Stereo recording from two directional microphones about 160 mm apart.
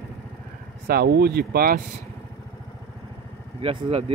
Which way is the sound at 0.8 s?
75° right (ahead or behind).